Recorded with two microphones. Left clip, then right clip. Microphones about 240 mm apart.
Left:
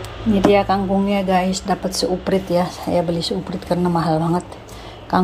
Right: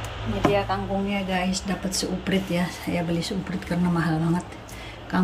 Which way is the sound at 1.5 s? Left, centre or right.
Centre.